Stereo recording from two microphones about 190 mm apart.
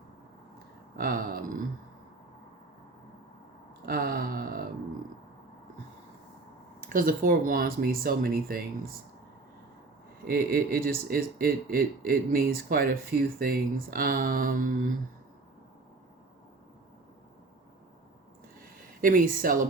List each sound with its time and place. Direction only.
0.9 s speech: 50° right (ahead or behind)
3.8 s a sound: 55° right (ahead or behind)
6.7 s speech: 45° right (ahead or behind)
10.2 s speech: 50° right (ahead or behind)
19.0 s speech: 45° right (ahead or behind)